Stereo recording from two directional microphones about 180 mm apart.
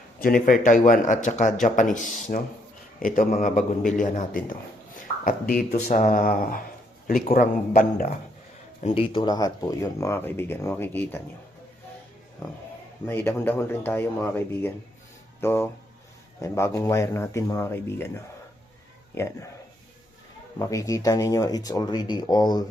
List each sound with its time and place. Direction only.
0.2 s a man's voice: 55° left (ahead or behind)
7.7 s a man's voice: 50° left (ahead or behind)
8.8 s speech: 30° left (ahead or behind); by 11.2 s 10° left (ahead or behind)
13.1 s speech: 10° left (ahead or behind)
20.6 s speech: 20° left (ahead or behind)